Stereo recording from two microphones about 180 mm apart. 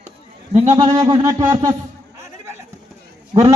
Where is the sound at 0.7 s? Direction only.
20° right (ahead or behind).